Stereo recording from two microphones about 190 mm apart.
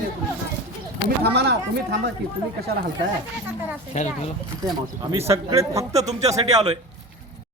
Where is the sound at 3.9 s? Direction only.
35° left (ahead or behind).